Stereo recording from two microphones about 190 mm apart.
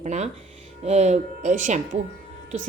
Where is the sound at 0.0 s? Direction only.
35° right (ahead or behind).